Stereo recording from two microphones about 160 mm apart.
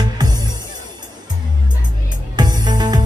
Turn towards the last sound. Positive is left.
turn(degrees=-25)  # may be behind; listen again after turning